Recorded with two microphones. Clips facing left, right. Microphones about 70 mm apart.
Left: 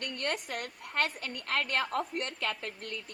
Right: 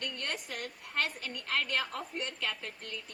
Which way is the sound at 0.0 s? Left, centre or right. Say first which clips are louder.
Left 4 dB; left.